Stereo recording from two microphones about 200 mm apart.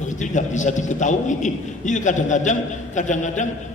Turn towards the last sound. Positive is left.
turn(degrees=35)  # may be behind; listen again after turning